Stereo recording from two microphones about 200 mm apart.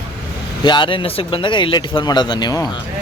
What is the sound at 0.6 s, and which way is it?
Speech, 20° left (ahead or behind).